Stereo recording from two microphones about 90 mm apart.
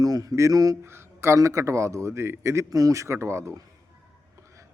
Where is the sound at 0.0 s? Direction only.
45° right (ahead or behind).